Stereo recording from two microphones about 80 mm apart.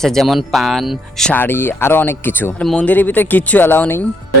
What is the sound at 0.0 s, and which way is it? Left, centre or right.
Speech, centre.